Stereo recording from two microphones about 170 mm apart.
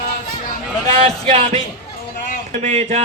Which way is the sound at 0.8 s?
40° right (ahead or behind).